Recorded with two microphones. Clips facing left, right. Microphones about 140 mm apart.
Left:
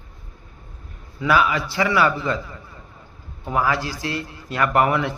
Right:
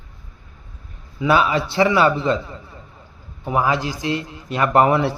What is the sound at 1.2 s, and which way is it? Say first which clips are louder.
A man's voice: right 2 dB; 25° right (ahead or behind).